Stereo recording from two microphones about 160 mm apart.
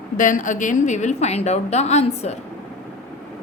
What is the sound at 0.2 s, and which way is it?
A woman's voice, 55° left (ahead or behind).